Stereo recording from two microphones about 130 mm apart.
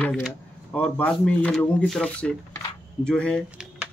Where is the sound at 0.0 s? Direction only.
5° left (ahead or behind).